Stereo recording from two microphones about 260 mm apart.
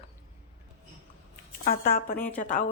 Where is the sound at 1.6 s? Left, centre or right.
Left.